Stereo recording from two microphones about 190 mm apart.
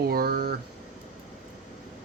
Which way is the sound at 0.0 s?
55° right (ahead or behind).